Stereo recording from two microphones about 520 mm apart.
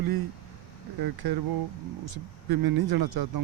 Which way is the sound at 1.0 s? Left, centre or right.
Right.